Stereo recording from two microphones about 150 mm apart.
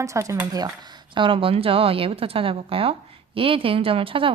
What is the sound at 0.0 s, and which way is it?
Speech, 20° right (ahead or behind).